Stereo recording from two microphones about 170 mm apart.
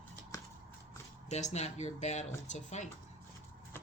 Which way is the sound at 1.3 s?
40° left (ahead or behind).